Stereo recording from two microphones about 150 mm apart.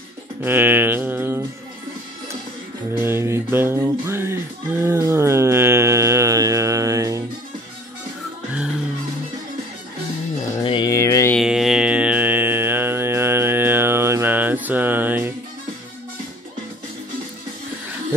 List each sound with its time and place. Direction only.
0.4 s music: 15° right (ahead or behind)
3.0 s music: 15° right (ahead or behind)
10.6 s a sound: 35° left (ahead or behind)
10.9 s music: 20° left (ahead or behind)
11.3 s music: centre (ahead or behind)